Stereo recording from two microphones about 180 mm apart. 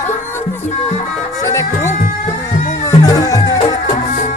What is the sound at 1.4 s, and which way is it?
Music, 15° left (ahead or behind).